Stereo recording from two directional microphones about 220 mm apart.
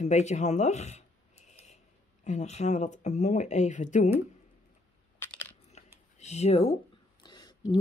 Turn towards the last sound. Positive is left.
turn(degrees=20)  # may be behind; listen again after turning